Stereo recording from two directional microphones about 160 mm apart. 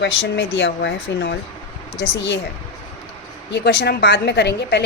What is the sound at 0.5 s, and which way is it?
A woman's voice, 90° left.